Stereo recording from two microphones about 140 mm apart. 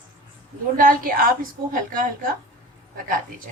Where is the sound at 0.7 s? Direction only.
85° right.